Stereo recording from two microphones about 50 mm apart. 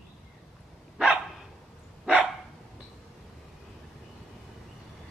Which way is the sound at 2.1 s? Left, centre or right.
Right.